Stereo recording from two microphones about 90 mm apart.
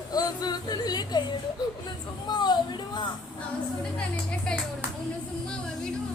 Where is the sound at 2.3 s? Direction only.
55° left (ahead or behind).